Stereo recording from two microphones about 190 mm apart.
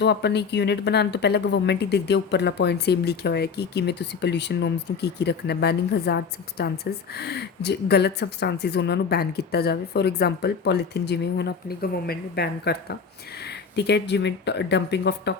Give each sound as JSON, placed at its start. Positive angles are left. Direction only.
{"t": 0.0, "sound": "speech", "side_deg": 60}